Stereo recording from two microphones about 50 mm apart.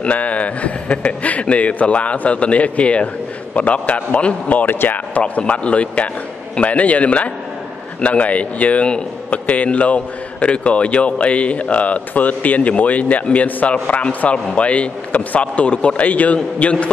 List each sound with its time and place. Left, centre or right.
0.0 s a man's voice: left
5.2 s a man's voice: left